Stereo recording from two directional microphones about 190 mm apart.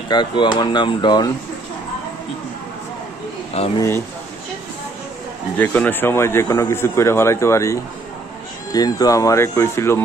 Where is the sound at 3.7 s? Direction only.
15° left (ahead or behind).